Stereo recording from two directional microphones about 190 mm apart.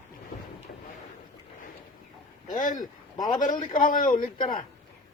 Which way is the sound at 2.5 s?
45° left (ahead or behind).